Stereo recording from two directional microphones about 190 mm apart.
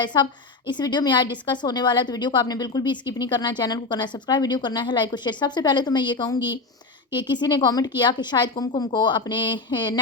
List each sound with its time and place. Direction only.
0.0 s a woman's voice: 25° left (ahead or behind)